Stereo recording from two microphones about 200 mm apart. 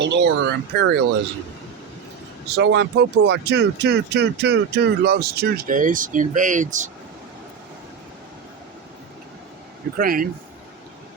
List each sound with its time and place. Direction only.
0.0 s speech: 60° right (ahead or behind)
2.6 s speech: 60° right (ahead or behind); by 6.9 s 40° right (ahead or behind)
10.0 s speech: 45° right (ahead or behind)